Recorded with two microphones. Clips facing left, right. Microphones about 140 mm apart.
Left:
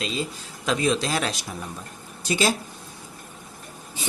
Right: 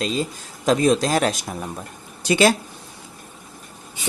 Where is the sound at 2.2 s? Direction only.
70° right (ahead or behind).